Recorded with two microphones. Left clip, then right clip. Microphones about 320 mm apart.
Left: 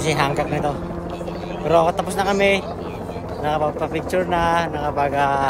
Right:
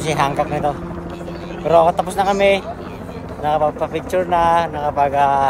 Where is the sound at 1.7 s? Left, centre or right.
Centre.